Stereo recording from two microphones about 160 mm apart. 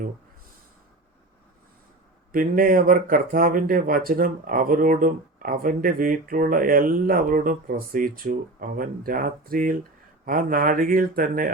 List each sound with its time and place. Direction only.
2.3 s a man's voice: 60° right (ahead or behind)